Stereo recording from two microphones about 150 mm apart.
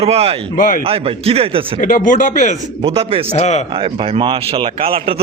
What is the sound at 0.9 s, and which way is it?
Speech, 40° right (ahead or behind).